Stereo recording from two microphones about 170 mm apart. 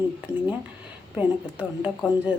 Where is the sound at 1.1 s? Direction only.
10° right (ahead or behind).